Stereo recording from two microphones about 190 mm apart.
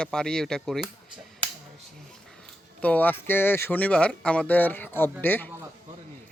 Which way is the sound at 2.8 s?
10° left (ahead or behind).